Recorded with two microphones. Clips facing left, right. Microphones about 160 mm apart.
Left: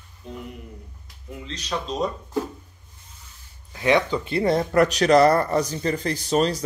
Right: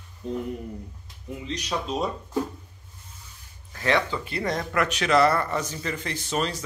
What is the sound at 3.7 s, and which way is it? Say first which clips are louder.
A man's voice: left 4 dB; 15° left (ahead or behind).